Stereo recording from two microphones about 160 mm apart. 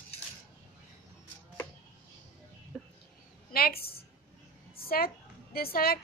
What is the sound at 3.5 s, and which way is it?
A woman's voice, 70° left (ahead or behind).